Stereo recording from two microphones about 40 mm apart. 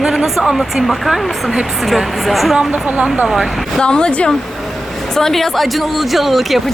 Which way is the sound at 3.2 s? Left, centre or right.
Centre.